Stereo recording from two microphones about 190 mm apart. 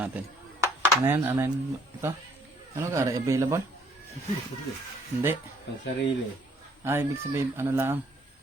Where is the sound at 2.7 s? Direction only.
15° right (ahead or behind).